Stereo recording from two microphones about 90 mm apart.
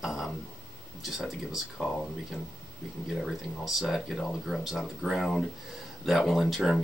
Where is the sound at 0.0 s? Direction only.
5° right (ahead or behind).